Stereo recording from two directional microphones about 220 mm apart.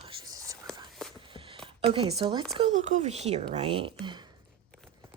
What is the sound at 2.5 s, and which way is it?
Speech, 35° right (ahead or behind).